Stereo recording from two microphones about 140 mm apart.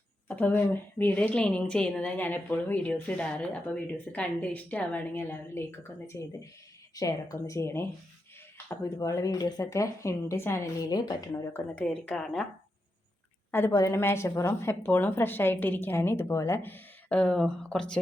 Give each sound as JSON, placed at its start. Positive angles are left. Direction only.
{"t": 0.3, "sound": "a woman's voice", "side_deg": 10}
{"t": 11.5, "sound": "a woman's voice", "side_deg": 10}
{"t": 13.5, "sound": "a woman's voice", "side_deg": 20}